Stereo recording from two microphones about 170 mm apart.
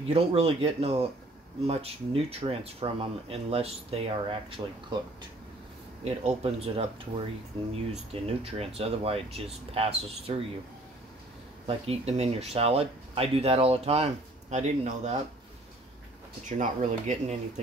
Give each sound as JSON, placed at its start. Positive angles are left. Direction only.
{"t": 0.1, "sound": "speech", "side_deg": -35}
{"t": 6.0, "sound": "speech", "side_deg": -40}
{"t": 8.1, "sound": "speech", "side_deg": -35}
{"t": 11.6, "sound": "speech", "side_deg": -35}
{"t": 16.4, "sound": "speech", "side_deg": -45}